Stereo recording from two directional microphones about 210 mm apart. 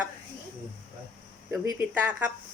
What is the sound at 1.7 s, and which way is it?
Speech, 10° right (ahead or behind).